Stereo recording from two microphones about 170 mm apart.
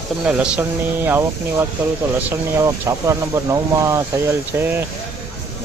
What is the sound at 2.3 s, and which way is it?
Speech, 15° right (ahead or behind).